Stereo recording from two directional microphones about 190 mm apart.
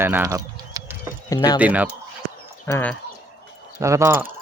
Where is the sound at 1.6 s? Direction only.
10° right (ahead or behind).